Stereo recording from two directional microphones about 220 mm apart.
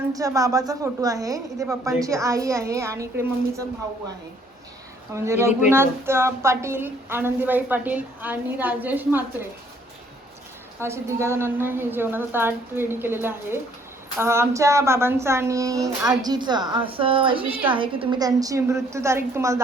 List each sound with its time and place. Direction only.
0.1 s speech: 15° right (ahead or behind)
5.1 s speech: 10° right (ahead or behind)
10.8 s speech: 10° right (ahead or behind)